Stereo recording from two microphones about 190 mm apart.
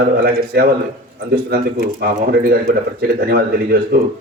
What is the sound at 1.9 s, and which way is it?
Speech, 55° right (ahead or behind).